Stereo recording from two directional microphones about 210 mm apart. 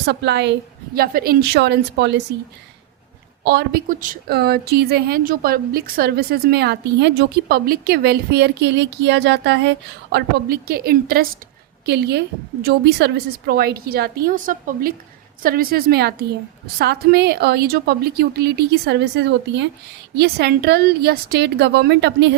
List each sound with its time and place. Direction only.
0.0 s a woman's voice: 55° right (ahead or behind)
3.4 s a woman's voice: 50° right (ahead or behind)